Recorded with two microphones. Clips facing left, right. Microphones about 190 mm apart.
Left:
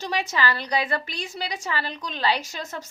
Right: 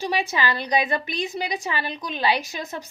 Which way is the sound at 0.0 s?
15° right (ahead or behind).